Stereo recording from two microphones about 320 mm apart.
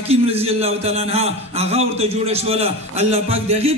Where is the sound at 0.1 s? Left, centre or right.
Centre.